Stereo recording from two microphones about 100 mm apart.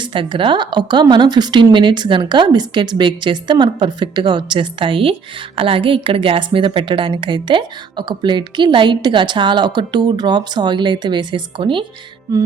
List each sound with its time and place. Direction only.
0.0 s a woman's voice: 55° right (ahead or behind)